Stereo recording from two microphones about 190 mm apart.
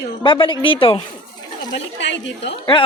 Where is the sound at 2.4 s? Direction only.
25° left (ahead or behind).